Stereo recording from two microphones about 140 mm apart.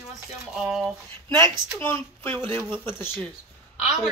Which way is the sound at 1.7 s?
15° left (ahead or behind).